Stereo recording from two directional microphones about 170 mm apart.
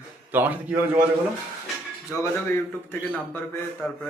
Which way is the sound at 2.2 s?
15° left (ahead or behind).